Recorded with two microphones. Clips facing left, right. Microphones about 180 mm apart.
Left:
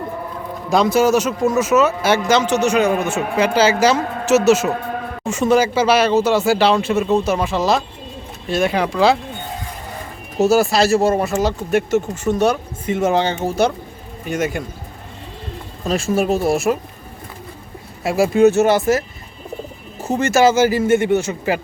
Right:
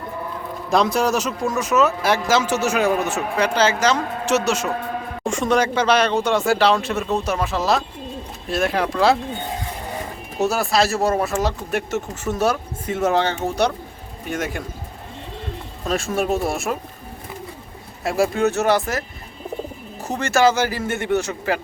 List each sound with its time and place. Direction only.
0.7 s speech: centre (ahead or behind)
10.4 s speech: centre (ahead or behind)
15.9 s speech: centre (ahead or behind)
18.0 s speech: 5° left (ahead or behind)